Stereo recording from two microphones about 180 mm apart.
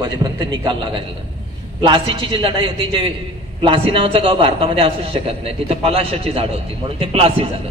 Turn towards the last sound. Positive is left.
turn(degrees=-30)  # may be behind; listen again after turning